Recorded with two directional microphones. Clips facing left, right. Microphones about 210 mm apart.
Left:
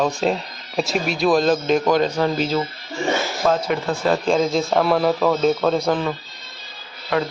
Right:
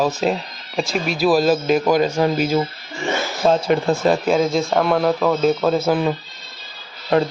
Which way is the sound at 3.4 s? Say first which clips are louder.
Right 4 dB; 25° right (ahead or behind).